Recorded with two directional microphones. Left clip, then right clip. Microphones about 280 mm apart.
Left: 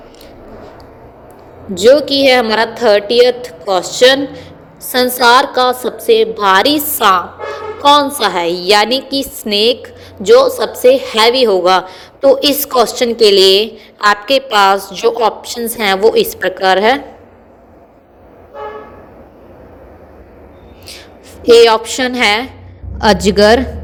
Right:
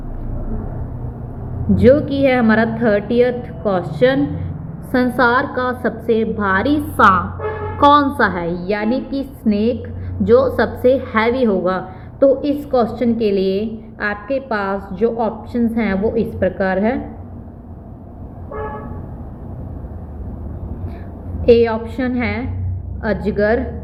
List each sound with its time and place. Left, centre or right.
1.8 s a woman's voice: left
21.4 s a woman's voice: left